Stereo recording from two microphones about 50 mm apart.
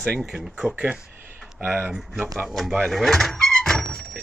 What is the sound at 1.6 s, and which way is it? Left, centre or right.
Speech, right.